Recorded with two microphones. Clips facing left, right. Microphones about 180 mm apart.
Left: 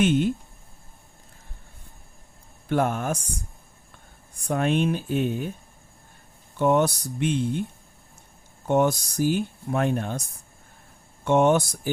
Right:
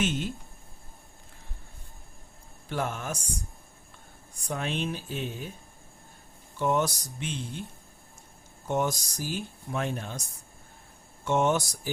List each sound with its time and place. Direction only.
0.0 s speech: 55° left (ahead or behind)
2.6 s speech: 55° left (ahead or behind)
4.4 s speech: 55° left (ahead or behind)
6.6 s speech: 60° left (ahead or behind)
8.6 s speech: 60° left (ahead or behind)
11.3 s speech: 55° left (ahead or behind)